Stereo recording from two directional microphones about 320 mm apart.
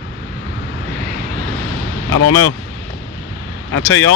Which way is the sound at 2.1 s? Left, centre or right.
Left.